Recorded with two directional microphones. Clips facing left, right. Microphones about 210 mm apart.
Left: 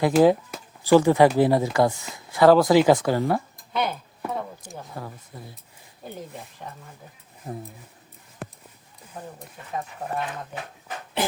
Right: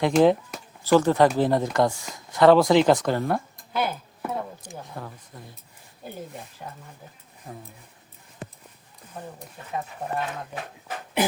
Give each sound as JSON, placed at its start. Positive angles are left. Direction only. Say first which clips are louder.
{"t": 0.0, "sound": "speech", "louder": "left 1 dB", "side_deg": 5}
{"t": 6.6, "sound": "speech", "louder": "even", "side_deg": 0}
{"t": 7.5, "sound": "speech", "louder": "left 6 dB", "side_deg": 25}